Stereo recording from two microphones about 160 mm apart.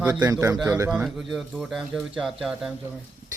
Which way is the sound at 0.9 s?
5° right (ahead or behind).